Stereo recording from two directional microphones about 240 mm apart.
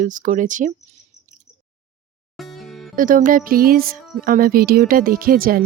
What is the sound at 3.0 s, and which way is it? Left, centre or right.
Speech, right.